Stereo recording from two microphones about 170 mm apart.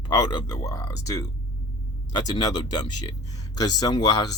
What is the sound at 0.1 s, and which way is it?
Speech, 25° left (ahead or behind).